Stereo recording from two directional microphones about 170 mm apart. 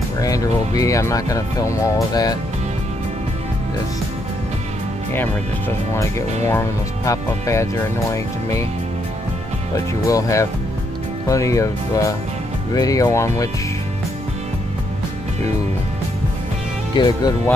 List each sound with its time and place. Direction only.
0.2 s speech: 20° left (ahead or behind)
6.4 s speech: 15° left (ahead or behind)
10.0 s speech: 20° left (ahead or behind)
16.9 s speech: 25° left (ahead or behind)